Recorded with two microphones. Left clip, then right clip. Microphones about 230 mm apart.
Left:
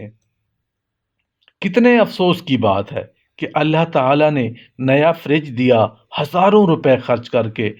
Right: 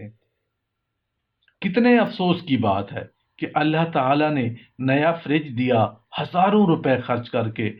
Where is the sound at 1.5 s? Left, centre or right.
Left.